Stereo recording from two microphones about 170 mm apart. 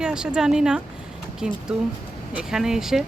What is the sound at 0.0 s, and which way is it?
Speech, 5° right (ahead or behind).